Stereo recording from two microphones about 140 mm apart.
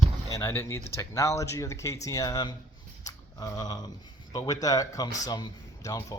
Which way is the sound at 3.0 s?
25° left (ahead or behind).